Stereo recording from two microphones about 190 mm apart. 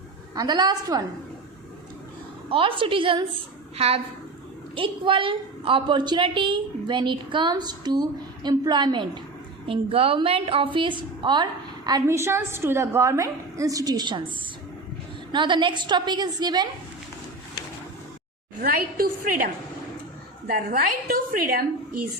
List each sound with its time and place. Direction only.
0.3 s a woman's voice: 20° right (ahead or behind)
2.5 s a woman's voice: 30° right (ahead or behind)
15.3 s a woman's voice: 25° right (ahead or behind)
18.6 s a woman's voice: 50° right (ahead or behind)
20.5 s a woman's voice: 50° right (ahead or behind)